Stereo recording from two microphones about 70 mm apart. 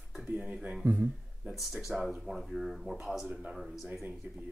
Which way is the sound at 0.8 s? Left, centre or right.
Right.